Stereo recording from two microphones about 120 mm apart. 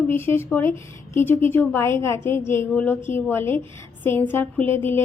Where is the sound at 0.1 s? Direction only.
20° left (ahead or behind).